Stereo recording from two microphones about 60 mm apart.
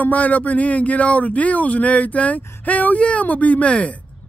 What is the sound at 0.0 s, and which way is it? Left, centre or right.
A woman's voice, left.